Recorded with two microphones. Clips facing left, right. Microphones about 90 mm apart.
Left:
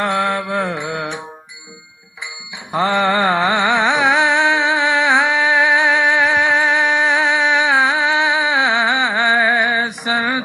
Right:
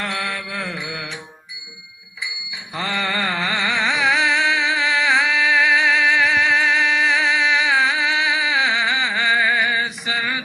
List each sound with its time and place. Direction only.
0.0 s music: 45° left (ahead or behind)
2.7 s mantra: 45° left (ahead or behind)
3.1 s music: 25° left (ahead or behind)
3.7 s music: 50° left (ahead or behind)
9.1 s a sound: 40° left (ahead or behind)
10.1 s a sound: 30° left (ahead or behind)